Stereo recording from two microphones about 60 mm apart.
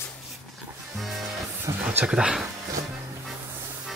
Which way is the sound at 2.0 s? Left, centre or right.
Centre.